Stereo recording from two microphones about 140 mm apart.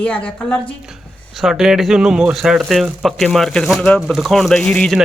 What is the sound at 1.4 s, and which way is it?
A man's voice, centre (ahead or behind).